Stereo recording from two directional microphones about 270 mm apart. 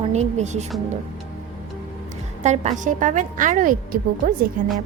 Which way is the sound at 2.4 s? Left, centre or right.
Right.